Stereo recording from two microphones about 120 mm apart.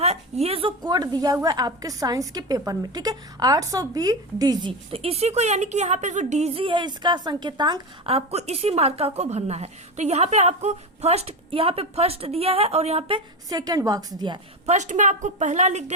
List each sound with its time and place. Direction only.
0.0 s a woman's voice: 60° right (ahead or behind)
0.8 s a woman's voice: 35° right (ahead or behind)
4.9 s a woman's voice: 55° right (ahead or behind); by 6.5 s 75° right (ahead or behind)
6.5 s a woman's voice: 45° right (ahead or behind)
8.0 s a woman's voice: 60° right (ahead or behind)
13.5 s a woman's voice: 30° right (ahead or behind)
14.7 s speech: 90° right; by 15.8 s 75° right (ahead or behind)